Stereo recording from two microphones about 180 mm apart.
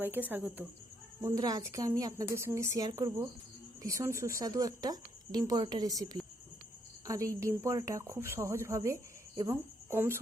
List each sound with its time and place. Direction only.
0.0 s a woman's voice: 10° right (ahead or behind)
1.2 s a woman's voice: 20° right (ahead or behind)